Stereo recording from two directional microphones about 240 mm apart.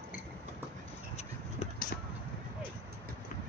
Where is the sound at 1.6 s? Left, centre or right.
Left.